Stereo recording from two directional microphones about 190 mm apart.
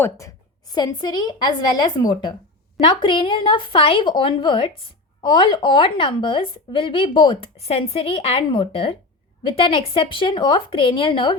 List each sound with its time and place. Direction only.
0.0 s speech: 15° left (ahead or behind)